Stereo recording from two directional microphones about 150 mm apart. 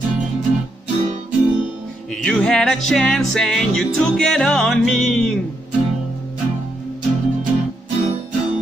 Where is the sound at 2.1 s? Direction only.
5° left (ahead or behind).